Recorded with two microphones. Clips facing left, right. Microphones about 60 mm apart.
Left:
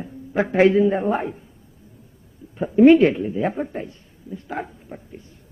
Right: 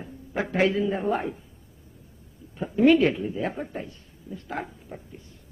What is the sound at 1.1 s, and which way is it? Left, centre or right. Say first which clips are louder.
Speech: left 3 dB; centre.